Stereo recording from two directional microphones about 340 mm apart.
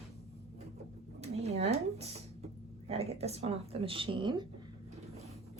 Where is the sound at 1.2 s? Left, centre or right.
Centre.